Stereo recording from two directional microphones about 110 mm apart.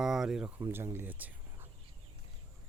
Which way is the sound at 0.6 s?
25° right (ahead or behind).